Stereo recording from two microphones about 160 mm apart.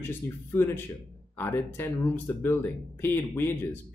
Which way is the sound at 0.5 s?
15° left (ahead or behind).